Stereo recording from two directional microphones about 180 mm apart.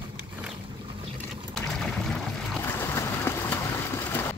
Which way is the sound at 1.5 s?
Centre (ahead or behind).